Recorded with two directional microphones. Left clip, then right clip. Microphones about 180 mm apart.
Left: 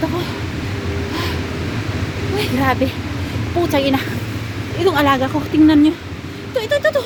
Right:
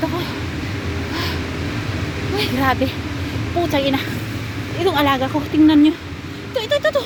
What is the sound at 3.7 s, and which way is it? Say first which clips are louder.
A woman's voice: left 3 dB; 20° left (ahead or behind).